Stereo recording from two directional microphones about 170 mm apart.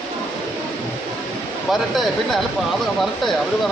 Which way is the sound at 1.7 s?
Centre (ahead or behind).